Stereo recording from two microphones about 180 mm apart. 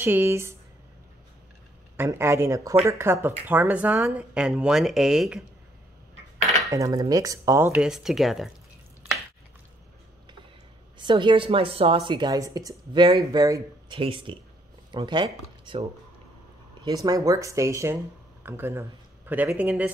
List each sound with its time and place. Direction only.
0.0 s speech: 10° right (ahead or behind)
2.0 s speech: 15° right (ahead or behind)
6.7 s speech: 20° right (ahead or behind); by 8.5 s centre (ahead or behind)
11.0 s speech: 25° right (ahead or behind); by 19.9 s 10° right (ahead or behind)